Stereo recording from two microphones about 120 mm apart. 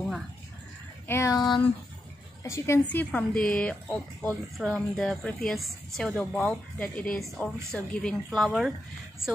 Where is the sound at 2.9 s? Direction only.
10° left (ahead or behind).